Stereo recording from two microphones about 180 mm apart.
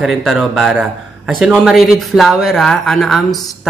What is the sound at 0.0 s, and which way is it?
Speech, centre (ahead or behind).